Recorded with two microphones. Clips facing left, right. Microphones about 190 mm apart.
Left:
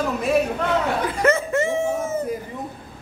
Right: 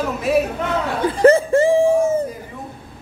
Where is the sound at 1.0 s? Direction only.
30° right (ahead or behind).